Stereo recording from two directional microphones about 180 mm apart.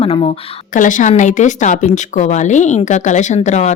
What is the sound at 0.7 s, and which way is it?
A woman's voice, 45° left (ahead or behind).